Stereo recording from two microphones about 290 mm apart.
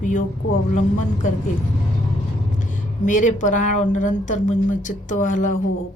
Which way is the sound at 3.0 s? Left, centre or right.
Left.